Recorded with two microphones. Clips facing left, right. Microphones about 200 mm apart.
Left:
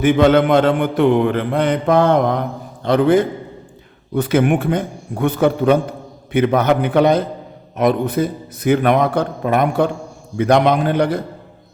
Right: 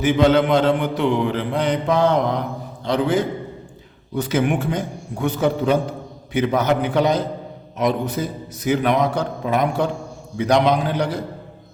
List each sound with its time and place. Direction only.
0.0 s a man's voice: 55° left (ahead or behind)